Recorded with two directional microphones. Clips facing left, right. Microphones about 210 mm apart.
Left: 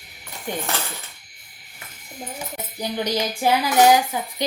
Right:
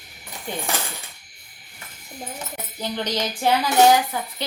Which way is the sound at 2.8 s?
10° left (ahead or behind).